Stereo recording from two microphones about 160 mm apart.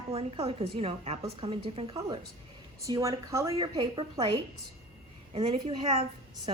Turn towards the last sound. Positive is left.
turn(degrees=-35)  # may be behind; listen again after turning